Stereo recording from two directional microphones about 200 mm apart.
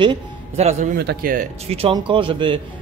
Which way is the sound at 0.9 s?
55° right (ahead or behind).